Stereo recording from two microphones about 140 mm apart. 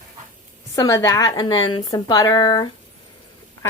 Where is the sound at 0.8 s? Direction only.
20° left (ahead or behind).